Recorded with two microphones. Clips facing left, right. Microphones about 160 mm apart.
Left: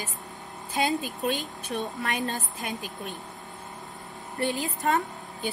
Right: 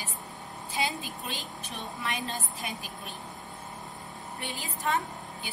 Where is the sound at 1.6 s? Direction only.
45° left (ahead or behind).